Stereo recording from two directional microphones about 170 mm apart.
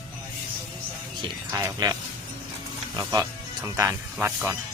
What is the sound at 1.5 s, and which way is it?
Speech, 20° right (ahead or behind).